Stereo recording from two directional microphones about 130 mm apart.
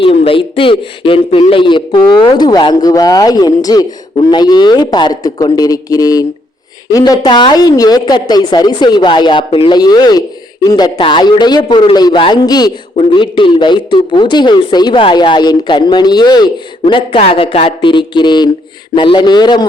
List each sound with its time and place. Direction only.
0.0 s speech: 45° left (ahead or behind)
9.7 s speech: 30° left (ahead or behind)
13.0 s speech: 40° left (ahead or behind)